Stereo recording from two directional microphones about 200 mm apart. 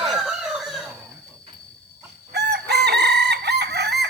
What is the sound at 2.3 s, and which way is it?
Chicken, 55° right (ahead or behind).